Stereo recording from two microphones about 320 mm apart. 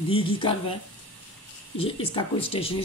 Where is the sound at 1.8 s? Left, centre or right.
Centre.